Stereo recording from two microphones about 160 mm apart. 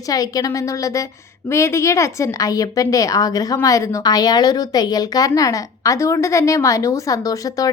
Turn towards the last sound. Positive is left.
turn(degrees=20)  # may be behind; listen again after turning